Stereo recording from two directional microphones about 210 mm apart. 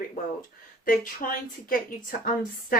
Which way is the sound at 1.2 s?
40° left (ahead or behind).